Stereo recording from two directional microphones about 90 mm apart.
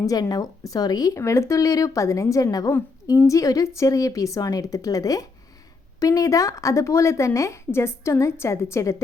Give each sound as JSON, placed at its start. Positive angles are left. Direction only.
{"t": 0.0, "sound": "a woman's voice", "side_deg": 45}